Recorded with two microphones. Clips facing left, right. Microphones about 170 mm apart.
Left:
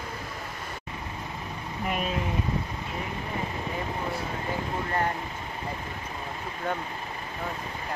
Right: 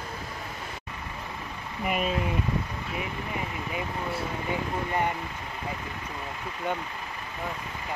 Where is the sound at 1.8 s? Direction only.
5° right (ahead or behind).